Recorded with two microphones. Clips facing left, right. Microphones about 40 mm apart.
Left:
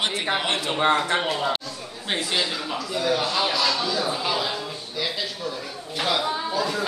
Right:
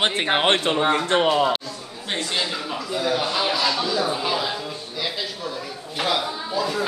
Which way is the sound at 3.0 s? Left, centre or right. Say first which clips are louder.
Even; centre.